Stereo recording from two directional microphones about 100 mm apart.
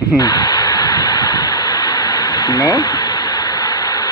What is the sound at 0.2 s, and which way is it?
Radio, 45° left (ahead or behind).